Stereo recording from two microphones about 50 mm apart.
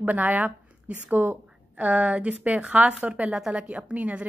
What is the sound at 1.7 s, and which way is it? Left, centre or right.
A woman's voice, right.